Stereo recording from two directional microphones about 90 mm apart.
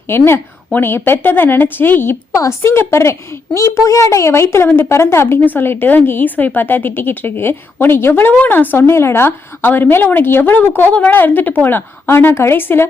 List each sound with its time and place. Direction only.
0.1 s a woman's voice: 25° left (ahead or behind)